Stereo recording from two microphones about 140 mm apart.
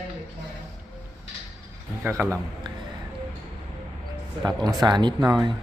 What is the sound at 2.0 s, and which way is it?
Speech, 15° right (ahead or behind).